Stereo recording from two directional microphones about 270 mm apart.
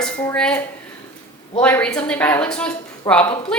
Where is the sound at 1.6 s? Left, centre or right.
Centre.